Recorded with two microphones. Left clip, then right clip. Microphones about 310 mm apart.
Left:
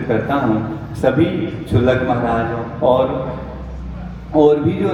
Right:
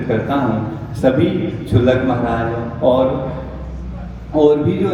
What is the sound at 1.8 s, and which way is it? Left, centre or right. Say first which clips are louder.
Speech: even; centre.